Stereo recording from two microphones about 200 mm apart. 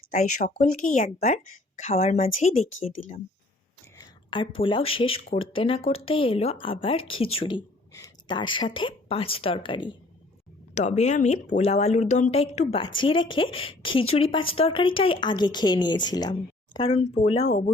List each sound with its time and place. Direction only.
0.1 s speech: 35° left (ahead or behind)
3.9 s a woman's voice: 20° left (ahead or behind)
10.8 s speech: 35° left (ahead or behind)